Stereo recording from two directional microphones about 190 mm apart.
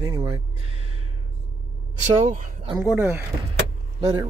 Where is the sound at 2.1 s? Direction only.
40° right (ahead or behind).